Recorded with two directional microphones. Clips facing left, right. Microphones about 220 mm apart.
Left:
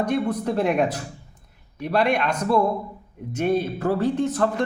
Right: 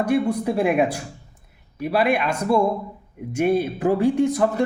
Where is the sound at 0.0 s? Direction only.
10° right (ahead or behind).